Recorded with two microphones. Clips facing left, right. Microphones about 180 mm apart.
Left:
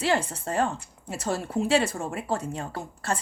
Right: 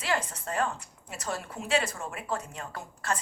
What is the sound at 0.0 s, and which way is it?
Speech, 30° left (ahead or behind).